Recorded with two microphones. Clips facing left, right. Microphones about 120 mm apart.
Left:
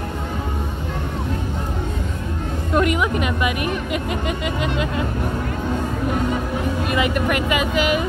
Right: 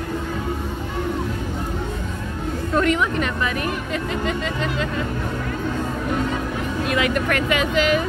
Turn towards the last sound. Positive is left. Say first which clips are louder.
# even
turn(degrees=5)  # may be behind; listen again after turning